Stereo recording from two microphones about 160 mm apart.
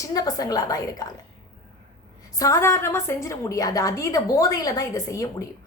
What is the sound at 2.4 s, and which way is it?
A woman's voice, 20° left (ahead or behind).